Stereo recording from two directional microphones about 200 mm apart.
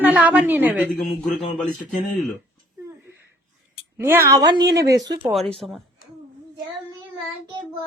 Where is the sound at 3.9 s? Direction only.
15° right (ahead or behind).